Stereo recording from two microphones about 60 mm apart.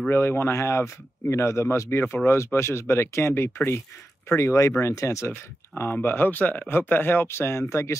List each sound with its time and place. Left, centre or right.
0.1 s speech: left
4.4 s speech: left